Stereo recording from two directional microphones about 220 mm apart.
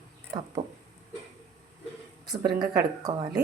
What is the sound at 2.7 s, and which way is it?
Speech, 15° right (ahead or behind).